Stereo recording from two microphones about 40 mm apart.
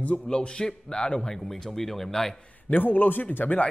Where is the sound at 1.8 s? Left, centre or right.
Centre.